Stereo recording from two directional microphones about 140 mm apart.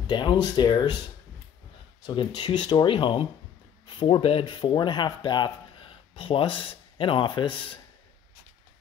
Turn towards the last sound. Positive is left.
turn(degrees=35)  # may be behind; listen again after turning